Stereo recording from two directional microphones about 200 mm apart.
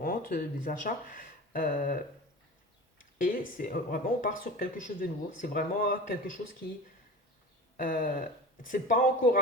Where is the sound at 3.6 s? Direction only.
45° left (ahead or behind).